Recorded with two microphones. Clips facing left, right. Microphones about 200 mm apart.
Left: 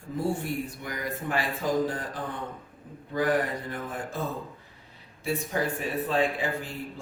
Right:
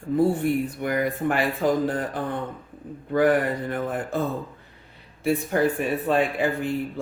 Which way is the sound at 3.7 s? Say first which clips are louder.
Right 7 dB; 60° right (ahead or behind).